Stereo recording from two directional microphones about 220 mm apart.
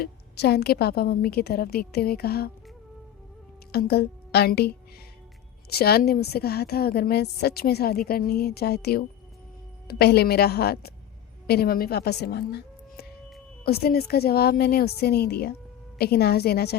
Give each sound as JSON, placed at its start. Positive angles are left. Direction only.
{"t": 0.0, "sound": "a woman's voice", "side_deg": 45}
{"t": 3.7, "sound": "a woman's voice", "side_deg": 45}
{"t": 5.7, "sound": "a woman's voice", "side_deg": 45}
{"t": 13.7, "sound": "a woman's voice", "side_deg": 45}